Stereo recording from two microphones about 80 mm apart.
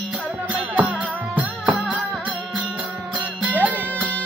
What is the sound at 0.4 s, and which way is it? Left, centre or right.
Music, centre.